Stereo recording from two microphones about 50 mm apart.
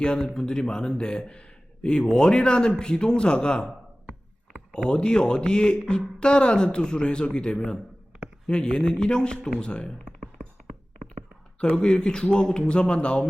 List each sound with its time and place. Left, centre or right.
0.0 s a man's voice: centre
4.7 s a man's voice: centre
10.1 s a sound: centre
11.6 s speech: centre